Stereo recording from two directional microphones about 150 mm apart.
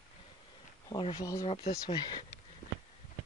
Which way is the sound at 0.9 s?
30° left (ahead or behind).